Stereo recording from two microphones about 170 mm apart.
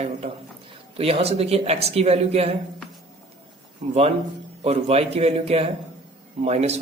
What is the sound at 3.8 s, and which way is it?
A man's voice, 35° right (ahead or behind).